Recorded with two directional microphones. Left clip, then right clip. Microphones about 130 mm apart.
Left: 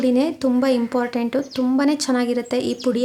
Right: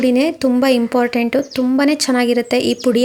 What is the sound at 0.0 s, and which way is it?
A woman's voice, 20° right (ahead or behind).